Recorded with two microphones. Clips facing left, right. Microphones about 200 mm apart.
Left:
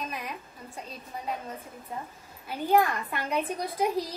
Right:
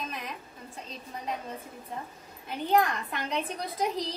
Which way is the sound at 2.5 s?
5° left (ahead or behind).